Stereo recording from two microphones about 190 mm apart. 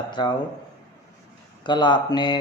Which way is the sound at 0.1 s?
20° left (ahead or behind).